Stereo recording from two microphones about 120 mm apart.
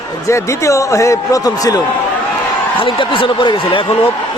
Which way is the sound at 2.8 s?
45° left (ahead or behind).